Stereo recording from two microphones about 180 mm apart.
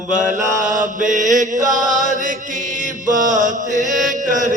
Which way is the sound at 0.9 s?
45° right (ahead or behind).